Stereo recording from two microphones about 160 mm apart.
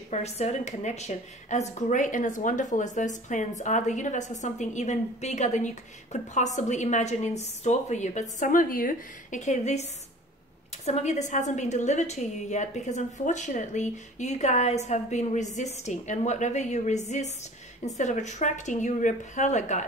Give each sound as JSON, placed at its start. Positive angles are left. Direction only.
{"t": 0.1, "sound": "a woman's voice", "side_deg": 45}
{"t": 10.9, "sound": "a woman's voice", "side_deg": 45}